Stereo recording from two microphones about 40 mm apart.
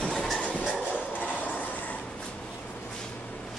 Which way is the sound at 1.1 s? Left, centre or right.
Left.